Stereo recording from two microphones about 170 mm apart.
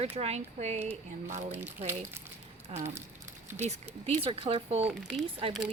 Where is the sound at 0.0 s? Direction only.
40° right (ahead or behind).